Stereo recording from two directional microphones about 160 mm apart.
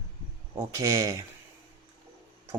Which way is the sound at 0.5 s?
20° right (ahead or behind).